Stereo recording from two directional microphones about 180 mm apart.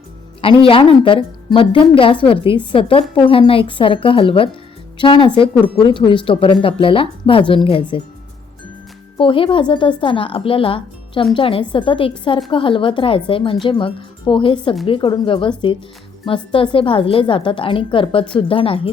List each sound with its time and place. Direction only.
0.4 s speech: 30° left (ahead or behind)
9.1 s speech: 30° left (ahead or behind)